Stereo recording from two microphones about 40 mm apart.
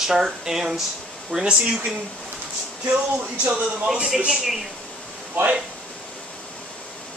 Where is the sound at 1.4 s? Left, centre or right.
Right.